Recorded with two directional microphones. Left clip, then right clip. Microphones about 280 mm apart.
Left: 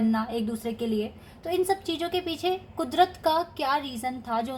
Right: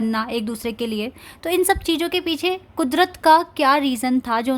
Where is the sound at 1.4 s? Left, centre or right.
Right.